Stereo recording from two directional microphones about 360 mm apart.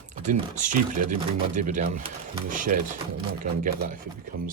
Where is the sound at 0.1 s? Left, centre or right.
Right.